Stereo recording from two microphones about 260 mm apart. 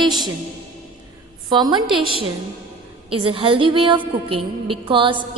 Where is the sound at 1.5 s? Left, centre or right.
Centre.